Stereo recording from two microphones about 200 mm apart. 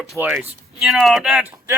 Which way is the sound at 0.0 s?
Centre (ahead or behind).